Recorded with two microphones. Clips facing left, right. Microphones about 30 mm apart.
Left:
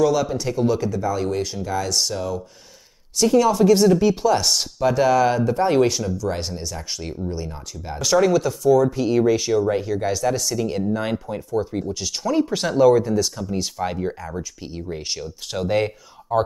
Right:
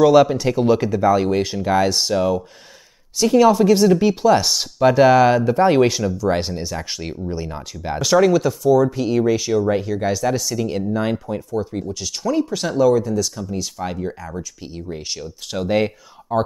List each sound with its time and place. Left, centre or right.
0.0 s speech: right
3.5 s speech: centre
7.5 s speech: right
8.0 s speech: centre